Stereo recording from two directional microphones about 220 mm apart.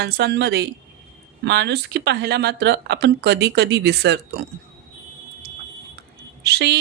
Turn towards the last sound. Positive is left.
turn(degrees=-50)  # may be behind; listen again after turning